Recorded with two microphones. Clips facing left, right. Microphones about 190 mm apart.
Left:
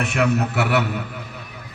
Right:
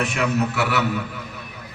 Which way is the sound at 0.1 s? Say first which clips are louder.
Left 2 dB; 55° left (ahead or behind).